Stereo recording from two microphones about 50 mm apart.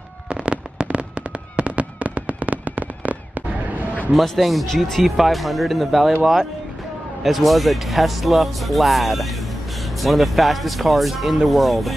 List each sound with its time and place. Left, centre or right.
0.3 s fireworks: right
4.1 s speech: centre
7.2 s speech: centre